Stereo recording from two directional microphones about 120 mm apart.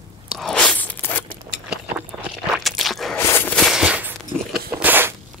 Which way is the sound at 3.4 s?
Centre (ahead or behind).